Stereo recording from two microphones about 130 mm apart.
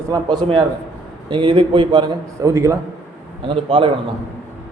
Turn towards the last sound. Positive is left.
turn(degrees=-45)  # may be behind; listen again after turning